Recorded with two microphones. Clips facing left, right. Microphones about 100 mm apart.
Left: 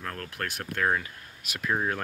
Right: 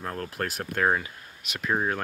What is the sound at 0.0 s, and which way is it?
Speech, 25° right (ahead or behind).